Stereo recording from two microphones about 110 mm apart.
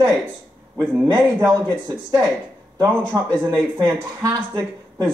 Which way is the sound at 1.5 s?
35° right (ahead or behind).